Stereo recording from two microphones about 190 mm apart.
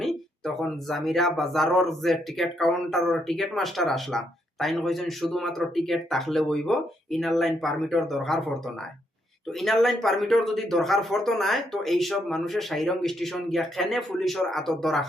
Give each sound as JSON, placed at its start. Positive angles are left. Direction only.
{"t": 0.0, "sound": "speech", "side_deg": 0}